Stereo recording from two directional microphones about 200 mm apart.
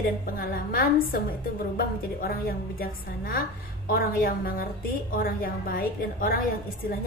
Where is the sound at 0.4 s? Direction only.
45° left (ahead or behind).